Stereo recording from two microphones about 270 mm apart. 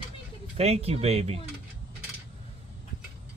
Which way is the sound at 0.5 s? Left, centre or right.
Right.